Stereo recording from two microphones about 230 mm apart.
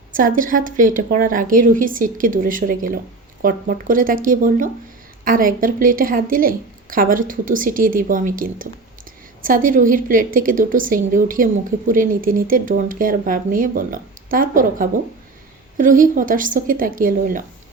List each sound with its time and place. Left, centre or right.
0.1 s a woman's voice: right